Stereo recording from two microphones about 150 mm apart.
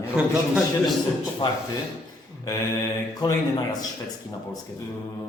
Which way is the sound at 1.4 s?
30° left (ahead or behind).